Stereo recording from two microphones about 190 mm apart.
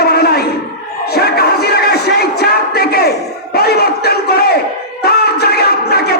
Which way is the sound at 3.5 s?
55° left (ahead or behind).